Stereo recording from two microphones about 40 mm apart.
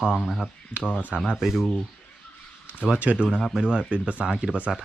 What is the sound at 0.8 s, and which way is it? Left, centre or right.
Speech, right.